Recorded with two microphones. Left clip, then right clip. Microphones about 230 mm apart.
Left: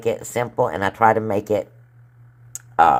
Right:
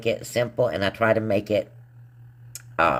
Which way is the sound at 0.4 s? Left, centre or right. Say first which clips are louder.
Left 3 dB; centre.